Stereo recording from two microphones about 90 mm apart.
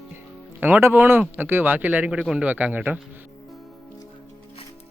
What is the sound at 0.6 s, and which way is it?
Speech, 25° right (ahead or behind).